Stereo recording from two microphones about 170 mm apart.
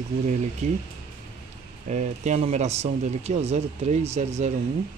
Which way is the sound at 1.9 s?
45° right (ahead or behind).